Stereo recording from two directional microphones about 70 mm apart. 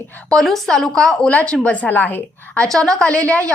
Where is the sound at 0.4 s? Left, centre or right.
Centre; by 2.6 s left.